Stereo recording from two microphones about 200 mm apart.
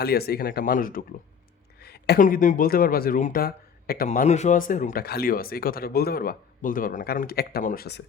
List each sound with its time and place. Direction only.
0.0 s speech: 50° left (ahead or behind)